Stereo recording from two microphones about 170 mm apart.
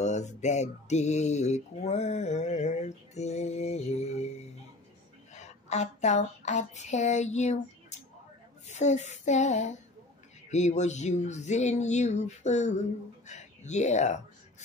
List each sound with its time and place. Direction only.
0.0 s speech: 45° left (ahead or behind)
5.3 s a sound: 45° left (ahead or behind)
8.6 s music: 40° left (ahead or behind)
13.3 s speech: 45° left (ahead or behind)